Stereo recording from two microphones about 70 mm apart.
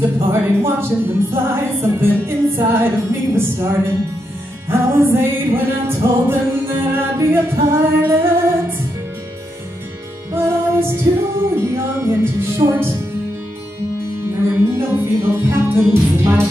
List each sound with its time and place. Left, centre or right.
0.0 s speech: right
10.3 s music: right
11.5 s speech: right
14.5 s music: right
15.9 s speech: right